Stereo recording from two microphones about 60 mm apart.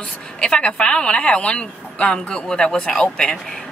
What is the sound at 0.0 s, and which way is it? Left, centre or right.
A woman's voice, centre.